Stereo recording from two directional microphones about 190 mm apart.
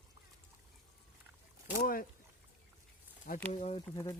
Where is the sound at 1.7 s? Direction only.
50° left (ahead or behind).